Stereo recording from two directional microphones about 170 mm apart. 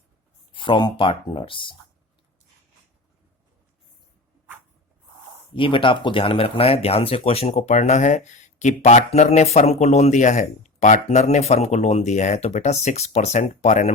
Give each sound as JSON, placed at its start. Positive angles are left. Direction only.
{"t": 0.5, "sound": "speech", "side_deg": 30}
{"t": 5.5, "sound": "speech", "side_deg": 30}